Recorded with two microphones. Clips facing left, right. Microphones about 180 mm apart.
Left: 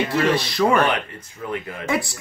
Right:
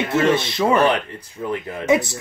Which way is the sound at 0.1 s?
25° right (ahead or behind).